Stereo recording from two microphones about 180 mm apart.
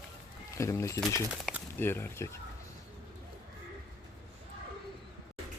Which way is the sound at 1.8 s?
10° left (ahead or behind).